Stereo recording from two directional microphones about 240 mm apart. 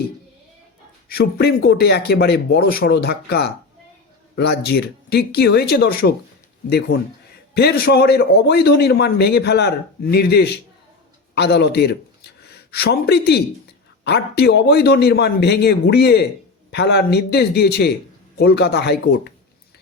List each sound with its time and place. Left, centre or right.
1.0 s a man's voice: left